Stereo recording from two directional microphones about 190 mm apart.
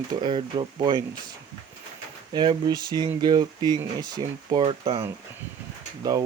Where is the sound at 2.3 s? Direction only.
25° right (ahead or behind).